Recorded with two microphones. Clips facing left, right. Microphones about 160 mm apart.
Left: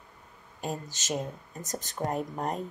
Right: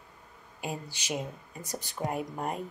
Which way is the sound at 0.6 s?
10° right (ahead or behind).